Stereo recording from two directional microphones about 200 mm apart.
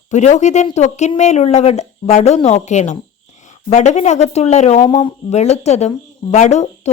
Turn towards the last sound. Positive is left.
turn(degrees=35)  # may be behind; listen again after turning